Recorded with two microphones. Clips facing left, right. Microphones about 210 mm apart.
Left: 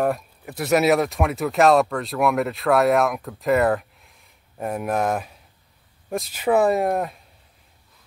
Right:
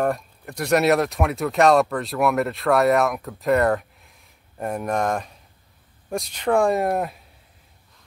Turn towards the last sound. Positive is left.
turn(degrees=0)  # may be behind; listen again after turning